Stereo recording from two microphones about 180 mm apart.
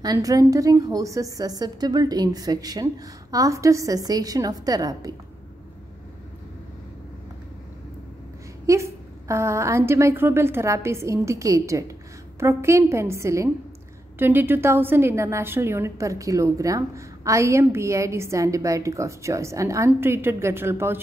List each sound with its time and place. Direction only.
0.0 s a woman's voice: 20° right (ahead or behind)
8.6 s a woman's voice: 15° right (ahead or behind)